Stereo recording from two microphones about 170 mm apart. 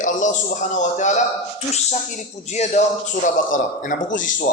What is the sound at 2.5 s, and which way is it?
A man's voice, 45° left (ahead or behind).